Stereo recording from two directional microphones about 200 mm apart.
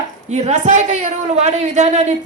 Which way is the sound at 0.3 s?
35° right (ahead or behind).